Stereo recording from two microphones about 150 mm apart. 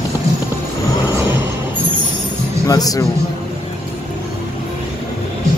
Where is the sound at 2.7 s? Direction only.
25° left (ahead or behind).